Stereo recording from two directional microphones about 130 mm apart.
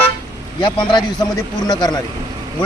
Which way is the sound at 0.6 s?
35° left (ahead or behind).